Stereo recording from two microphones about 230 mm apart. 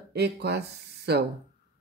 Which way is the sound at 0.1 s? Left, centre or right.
Right.